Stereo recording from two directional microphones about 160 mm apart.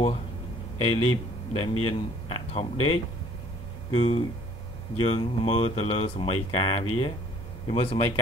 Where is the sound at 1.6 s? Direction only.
35° left (ahead or behind).